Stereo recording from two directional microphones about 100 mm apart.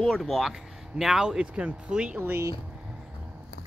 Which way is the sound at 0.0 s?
Centre (ahead or behind).